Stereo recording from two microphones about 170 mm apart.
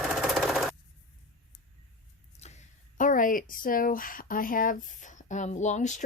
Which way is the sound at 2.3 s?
40° left (ahead or behind).